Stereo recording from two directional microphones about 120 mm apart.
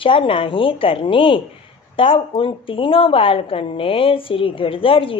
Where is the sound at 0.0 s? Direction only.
45° left (ahead or behind).